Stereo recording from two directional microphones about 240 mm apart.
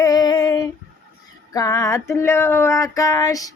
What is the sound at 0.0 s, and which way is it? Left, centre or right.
Female singing, centre.